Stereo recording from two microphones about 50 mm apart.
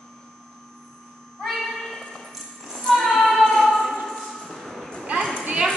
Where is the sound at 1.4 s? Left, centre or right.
Centre.